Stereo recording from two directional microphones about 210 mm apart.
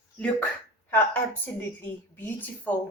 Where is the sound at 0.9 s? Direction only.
10° left (ahead or behind).